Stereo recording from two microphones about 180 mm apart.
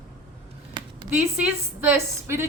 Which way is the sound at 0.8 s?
25° right (ahead or behind).